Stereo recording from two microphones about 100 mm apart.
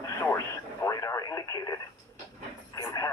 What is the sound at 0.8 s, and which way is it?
Radio, 35° left (ahead or behind).